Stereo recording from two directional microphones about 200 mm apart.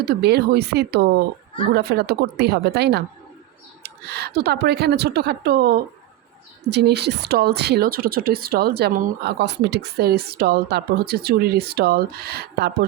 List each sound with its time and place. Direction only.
0.0 s a woman's voice: 55° right (ahead or behind)